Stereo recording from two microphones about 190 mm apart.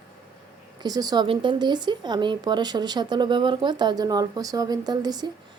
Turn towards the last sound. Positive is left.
turn(degrees=-20)  # may be behind; listen again after turning